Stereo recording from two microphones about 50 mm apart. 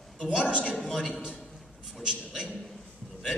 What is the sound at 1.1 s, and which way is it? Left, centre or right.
Speech, centre.